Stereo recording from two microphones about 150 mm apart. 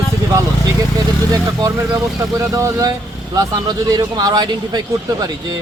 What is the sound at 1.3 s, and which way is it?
Speech, 20° right (ahead or behind).